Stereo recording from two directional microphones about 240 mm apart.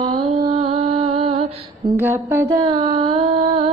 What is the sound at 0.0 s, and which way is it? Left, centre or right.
Music, centre.